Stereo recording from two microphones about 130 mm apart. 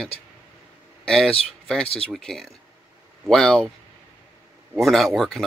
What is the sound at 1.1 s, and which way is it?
Speech, 5° left (ahead or behind).